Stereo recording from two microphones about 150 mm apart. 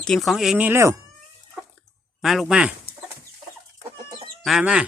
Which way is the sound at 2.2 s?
Centre (ahead or behind).